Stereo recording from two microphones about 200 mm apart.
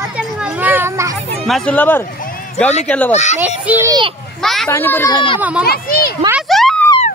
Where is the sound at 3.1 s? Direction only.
35° left (ahead or behind).